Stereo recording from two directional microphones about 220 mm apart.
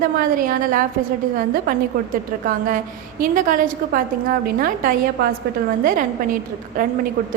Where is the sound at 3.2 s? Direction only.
35° right (ahead or behind).